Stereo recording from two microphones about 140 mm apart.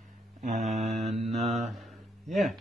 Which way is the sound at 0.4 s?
60° right (ahead or behind).